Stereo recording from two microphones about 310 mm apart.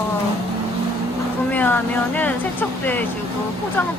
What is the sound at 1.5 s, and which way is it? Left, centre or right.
Speech, centre.